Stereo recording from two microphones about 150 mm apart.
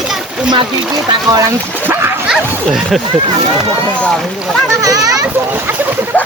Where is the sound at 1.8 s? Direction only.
15° right (ahead or behind).